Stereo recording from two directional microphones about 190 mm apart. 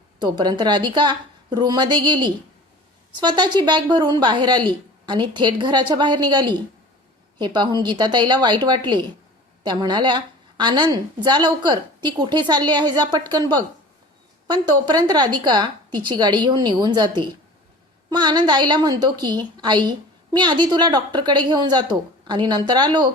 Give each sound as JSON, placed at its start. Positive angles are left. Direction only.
{"t": 0.2, "sound": "a woman's voice", "side_deg": -25}
{"t": 14.8, "sound": "a woman's voice", "side_deg": -20}